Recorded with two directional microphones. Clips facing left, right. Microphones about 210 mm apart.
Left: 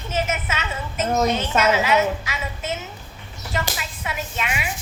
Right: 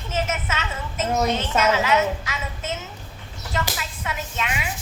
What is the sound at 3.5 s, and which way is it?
Speech, 10° left (ahead or behind).